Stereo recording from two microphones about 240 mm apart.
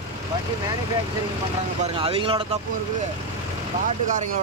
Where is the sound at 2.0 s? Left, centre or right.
Right.